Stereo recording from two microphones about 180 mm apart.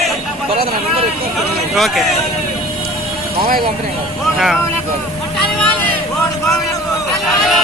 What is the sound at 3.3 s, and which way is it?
Speech, 55° right (ahead or behind).